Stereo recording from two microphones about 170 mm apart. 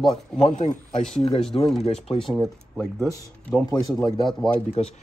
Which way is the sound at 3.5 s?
5° left (ahead or behind).